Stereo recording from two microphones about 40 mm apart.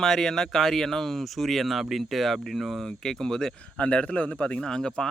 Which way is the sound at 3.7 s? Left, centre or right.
Left.